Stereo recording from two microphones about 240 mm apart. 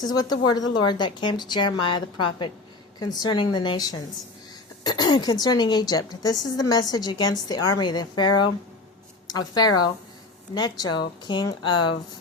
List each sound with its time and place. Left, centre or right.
0.0 s a woman's voice: centre